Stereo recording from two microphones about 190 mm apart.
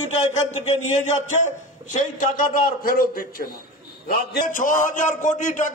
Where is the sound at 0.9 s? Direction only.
40° left (ahead or behind).